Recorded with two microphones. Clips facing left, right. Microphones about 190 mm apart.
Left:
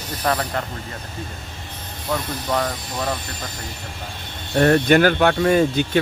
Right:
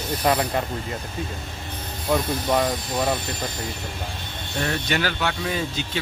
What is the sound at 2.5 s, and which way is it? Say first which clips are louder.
Speech: right 1 dB; 15° right (ahead or behind).